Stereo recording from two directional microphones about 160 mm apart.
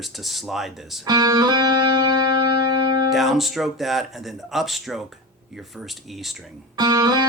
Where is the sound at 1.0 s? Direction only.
25° right (ahead or behind).